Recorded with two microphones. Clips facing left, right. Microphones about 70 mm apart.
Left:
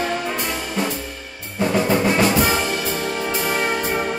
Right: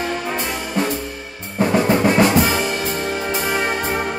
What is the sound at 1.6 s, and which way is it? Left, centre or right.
Drum, right.